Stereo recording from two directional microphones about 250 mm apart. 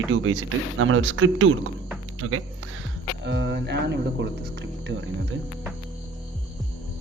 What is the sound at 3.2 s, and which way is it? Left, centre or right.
Speech, right.